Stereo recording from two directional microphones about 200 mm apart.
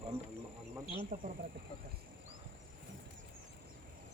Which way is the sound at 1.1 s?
45° right (ahead or behind).